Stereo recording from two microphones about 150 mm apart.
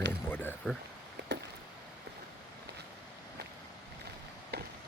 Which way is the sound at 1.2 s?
90° right.